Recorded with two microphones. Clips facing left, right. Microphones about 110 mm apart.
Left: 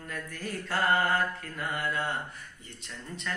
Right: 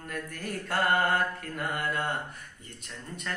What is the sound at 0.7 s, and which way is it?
Mantra, 55° right (ahead or behind).